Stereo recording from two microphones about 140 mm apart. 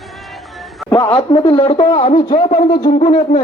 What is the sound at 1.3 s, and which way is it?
Brass instrument, 40° left (ahead or behind).